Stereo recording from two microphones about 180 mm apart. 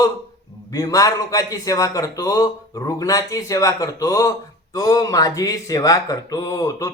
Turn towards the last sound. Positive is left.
turn(degrees=20)  # may be behind; listen again after turning